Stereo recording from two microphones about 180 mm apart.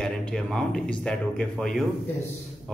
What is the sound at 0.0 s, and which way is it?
A man's voice, 5° left (ahead or behind).